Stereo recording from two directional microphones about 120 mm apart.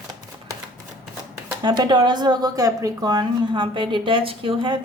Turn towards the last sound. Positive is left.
turn(degrees=-45)  # may be behind; listen again after turning